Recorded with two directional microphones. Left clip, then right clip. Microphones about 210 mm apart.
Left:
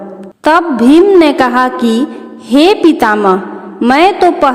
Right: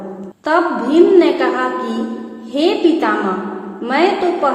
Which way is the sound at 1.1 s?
55° left (ahead or behind).